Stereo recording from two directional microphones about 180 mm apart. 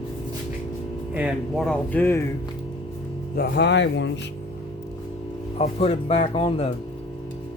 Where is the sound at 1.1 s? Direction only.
5° right (ahead or behind); by 2.2 s 10° left (ahead or behind).